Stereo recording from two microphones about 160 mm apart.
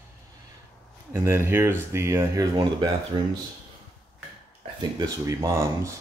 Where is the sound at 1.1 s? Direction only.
15° right (ahead or behind).